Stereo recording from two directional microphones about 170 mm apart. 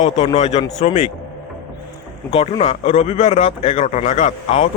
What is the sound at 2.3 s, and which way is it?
Speech, 35° left (ahead or behind).